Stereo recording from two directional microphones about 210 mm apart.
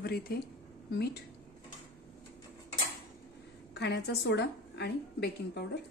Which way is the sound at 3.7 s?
50° left (ahead or behind).